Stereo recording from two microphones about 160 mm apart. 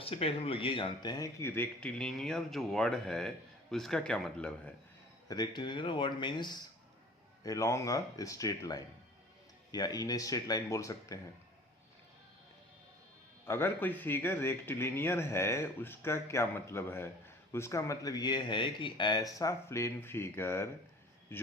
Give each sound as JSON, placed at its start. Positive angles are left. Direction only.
{"t": 0.0, "sound": "speech", "side_deg": 35}
{"t": 5.3, "sound": "speech", "side_deg": 25}
{"t": 13.4, "sound": "a man's voice", "side_deg": 15}